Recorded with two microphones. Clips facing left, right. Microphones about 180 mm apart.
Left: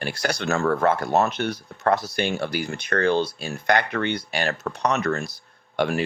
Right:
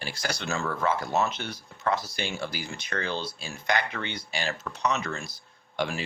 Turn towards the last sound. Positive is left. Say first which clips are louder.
# left 7 dB
turn(degrees=55)  # may be behind; listen again after turning